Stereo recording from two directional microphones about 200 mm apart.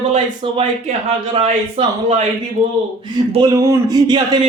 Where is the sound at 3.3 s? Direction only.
15° right (ahead or behind).